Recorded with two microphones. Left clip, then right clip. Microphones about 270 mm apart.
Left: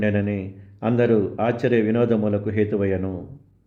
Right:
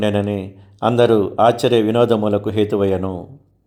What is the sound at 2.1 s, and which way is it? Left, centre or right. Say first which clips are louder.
Speech: right 5 dB; centre.